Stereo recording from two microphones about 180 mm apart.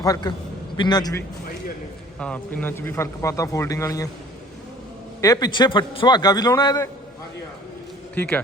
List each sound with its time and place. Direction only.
0.0 s a man's voice: 20° left (ahead or behind)
2.1 s speech: 5° left (ahead or behind)
5.2 s a man's voice: 20° left (ahead or behind)
8.1 s a man's voice: 10° left (ahead or behind)